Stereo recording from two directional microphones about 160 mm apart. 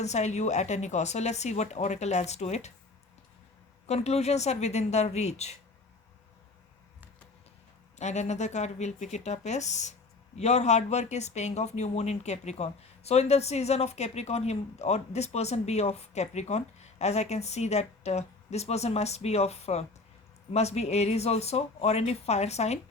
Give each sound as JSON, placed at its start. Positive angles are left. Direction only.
{"t": 0.0, "sound": "speech", "side_deg": 45}
{"t": 3.8, "sound": "speech", "side_deg": 40}
{"t": 7.9, "sound": "speech", "side_deg": 45}